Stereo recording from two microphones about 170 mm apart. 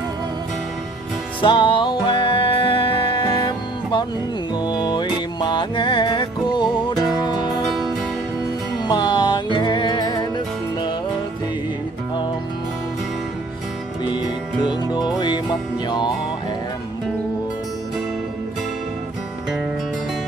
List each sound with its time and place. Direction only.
1.4 s music: 30° left (ahead or behind)
8.8 s music: 25° left (ahead or behind)
14.0 s music: 25° left (ahead or behind)